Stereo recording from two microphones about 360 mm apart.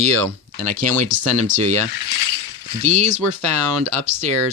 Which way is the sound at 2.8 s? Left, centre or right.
Centre.